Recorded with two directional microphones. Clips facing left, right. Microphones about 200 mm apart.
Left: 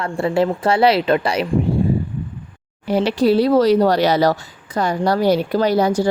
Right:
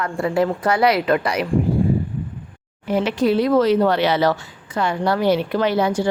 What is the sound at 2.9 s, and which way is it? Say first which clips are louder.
Speech: left 3 dB; 35° left (ahead or behind).